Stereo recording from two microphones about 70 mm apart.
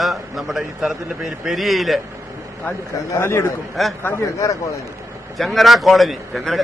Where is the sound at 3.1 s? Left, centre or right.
Left.